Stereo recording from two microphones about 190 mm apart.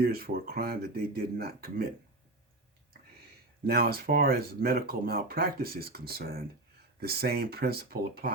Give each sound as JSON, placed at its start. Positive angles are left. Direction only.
{"t": 0.0, "sound": "speech", "side_deg": -55}
{"t": 3.7, "sound": "speech", "side_deg": -55}